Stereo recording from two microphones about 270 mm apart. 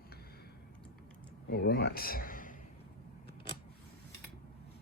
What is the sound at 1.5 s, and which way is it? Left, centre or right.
Speech, left.